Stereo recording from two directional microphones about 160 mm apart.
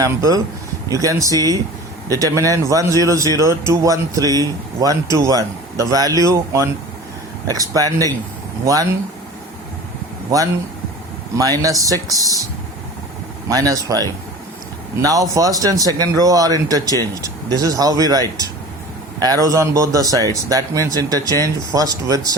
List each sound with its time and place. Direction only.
0.0 s speech: 20° right (ahead or behind)
11.3 s speech: 20° right (ahead or behind)
13.5 s speech: 20° right (ahead or behind)